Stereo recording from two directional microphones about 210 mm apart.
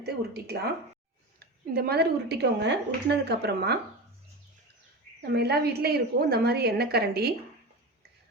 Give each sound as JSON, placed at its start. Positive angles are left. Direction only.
{"t": 0.0, "sound": "a woman's voice", "side_deg": -50}
{"t": 5.2, "sound": "a woman's voice", "side_deg": -50}